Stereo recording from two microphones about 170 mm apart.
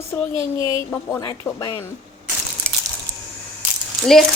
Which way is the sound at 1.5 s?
20° left (ahead or behind).